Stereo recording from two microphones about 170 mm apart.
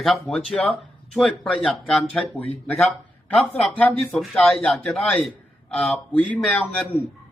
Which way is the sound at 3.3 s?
10° left (ahead or behind).